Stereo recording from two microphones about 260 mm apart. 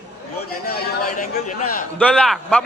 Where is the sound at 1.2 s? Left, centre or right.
Left.